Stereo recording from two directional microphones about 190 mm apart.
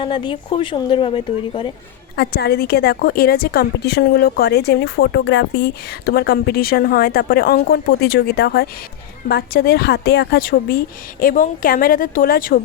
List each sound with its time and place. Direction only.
0.0 s speech: 25° left (ahead or behind)
2.1 s a woman's voice: 55° left (ahead or behind)